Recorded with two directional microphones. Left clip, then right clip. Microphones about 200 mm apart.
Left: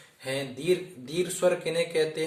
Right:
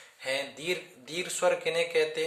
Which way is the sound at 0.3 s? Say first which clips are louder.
Left 3 dB; 45° right (ahead or behind).